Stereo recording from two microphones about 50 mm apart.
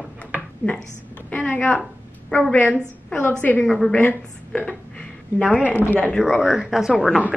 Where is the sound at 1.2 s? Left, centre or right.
Left.